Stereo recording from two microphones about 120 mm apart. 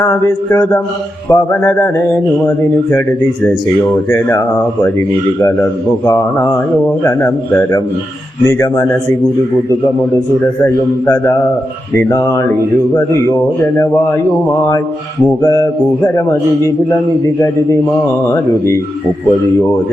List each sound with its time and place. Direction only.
0.0 s speech: 20° left (ahead or behind)
4.1 s speech: 20° left (ahead or behind)
6.1 s speech: 25° left (ahead or behind)
11.0 s speech: 20° left (ahead or behind)
15.4 s speech: 30° left (ahead or behind)
18.3 s speech: 25° left (ahead or behind)